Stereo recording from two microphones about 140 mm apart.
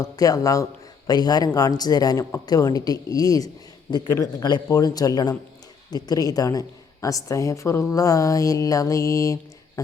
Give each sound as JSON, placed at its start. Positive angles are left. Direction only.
{"t": 0.0, "sound": "a woman's voice", "side_deg": 25}